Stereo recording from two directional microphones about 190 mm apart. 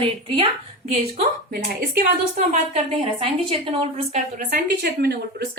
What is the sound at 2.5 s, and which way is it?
A woman's voice, 35° right (ahead or behind).